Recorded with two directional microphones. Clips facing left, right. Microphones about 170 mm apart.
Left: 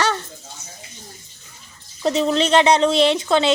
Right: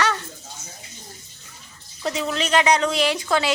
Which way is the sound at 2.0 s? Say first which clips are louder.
Left 7 dB; 30° left (ahead or behind).